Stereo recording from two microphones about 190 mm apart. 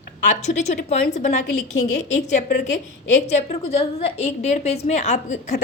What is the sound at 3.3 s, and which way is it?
A woman's voice, 35° left (ahead or behind).